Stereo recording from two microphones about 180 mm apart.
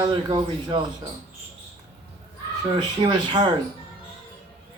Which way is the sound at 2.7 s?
25° right (ahead or behind).